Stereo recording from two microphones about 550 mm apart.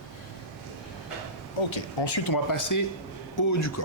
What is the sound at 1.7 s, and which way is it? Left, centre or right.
Speech, left.